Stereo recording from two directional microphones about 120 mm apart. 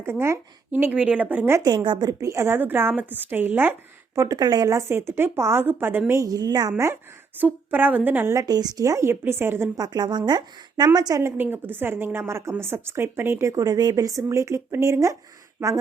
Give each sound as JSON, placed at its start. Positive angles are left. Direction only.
{"t": 0.0, "sound": "a woman's voice", "side_deg": -20}
{"t": 1.6, "sound": "speech", "side_deg": -40}
{"t": 4.2, "sound": "speech", "side_deg": -30}
{"t": 9.7, "sound": "a woman's voice", "side_deg": -35}